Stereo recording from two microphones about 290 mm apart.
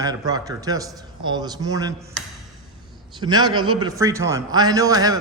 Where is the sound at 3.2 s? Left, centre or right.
Centre.